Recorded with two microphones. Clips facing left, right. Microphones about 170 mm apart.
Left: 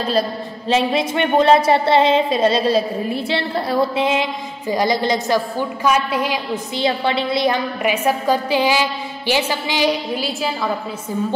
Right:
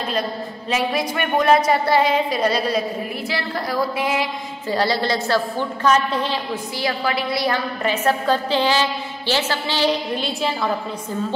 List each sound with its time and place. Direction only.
0.7 s a woman's voice: 25° left (ahead or behind)
6.8 s a woman's voice: 25° left (ahead or behind); by 10.7 s 5° left (ahead or behind)